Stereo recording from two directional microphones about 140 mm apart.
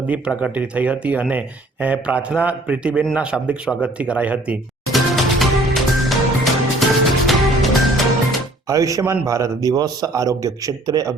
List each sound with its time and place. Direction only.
0.1 s speech: 10° right (ahead or behind)
3.2 s music: 10° right (ahead or behind)
8.6 s a man's voice: 25° right (ahead or behind)